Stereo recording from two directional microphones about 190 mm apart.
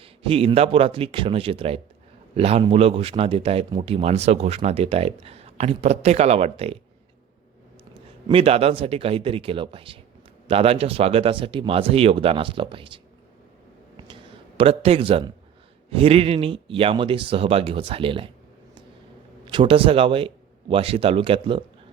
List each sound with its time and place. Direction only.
0.0 s a man's voice: 30° right (ahead or behind)
8.3 s speech: 30° right (ahead or behind)
14.6 s speech: 30° right (ahead or behind)
19.5 s speech: 25° right (ahead or behind)